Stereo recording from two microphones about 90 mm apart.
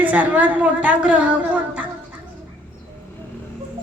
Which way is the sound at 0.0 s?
15° right (ahead or behind).